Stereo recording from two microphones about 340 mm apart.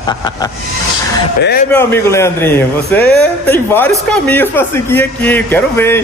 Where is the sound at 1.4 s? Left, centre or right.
Left.